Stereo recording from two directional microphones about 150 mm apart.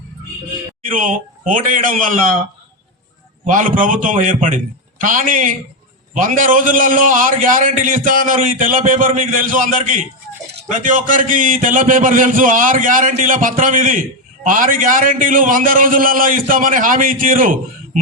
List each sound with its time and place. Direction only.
0.9 s a man's voice: 65° right (ahead or behind)
3.4 s a man's voice: 60° right (ahead or behind)